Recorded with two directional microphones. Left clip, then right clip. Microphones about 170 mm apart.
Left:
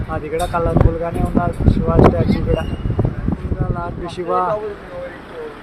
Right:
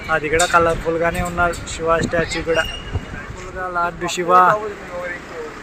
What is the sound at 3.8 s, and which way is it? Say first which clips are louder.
Speech: right 4 dB; centre (ahead or behind).